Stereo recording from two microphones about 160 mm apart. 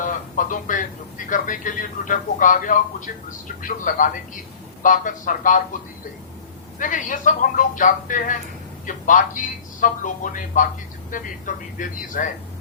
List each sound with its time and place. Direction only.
0.0 s speech: 55° left (ahead or behind)
6.7 s speech: 55° left (ahead or behind)